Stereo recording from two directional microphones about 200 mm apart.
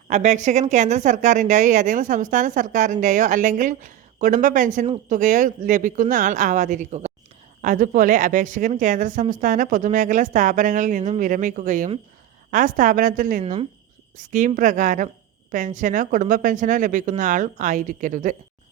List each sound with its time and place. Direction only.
0.1 s a woman's voice: 35° right (ahead or behind)
13.4 s speech: 30° right (ahead or behind)
14.2 s a woman's voice: 40° right (ahead or behind)